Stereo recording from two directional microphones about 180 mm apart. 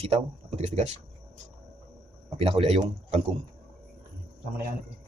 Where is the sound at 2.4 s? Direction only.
30° right (ahead or behind).